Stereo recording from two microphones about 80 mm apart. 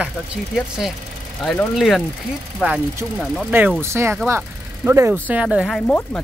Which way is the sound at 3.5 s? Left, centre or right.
Right.